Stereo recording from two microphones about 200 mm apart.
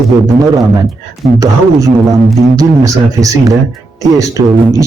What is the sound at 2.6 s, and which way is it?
A man's voice, 15° right (ahead or behind).